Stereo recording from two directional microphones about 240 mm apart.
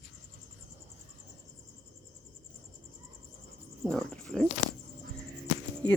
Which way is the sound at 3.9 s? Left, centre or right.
Centre.